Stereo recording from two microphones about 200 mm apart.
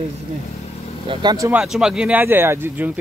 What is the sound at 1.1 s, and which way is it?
Speech, 20° right (ahead or behind).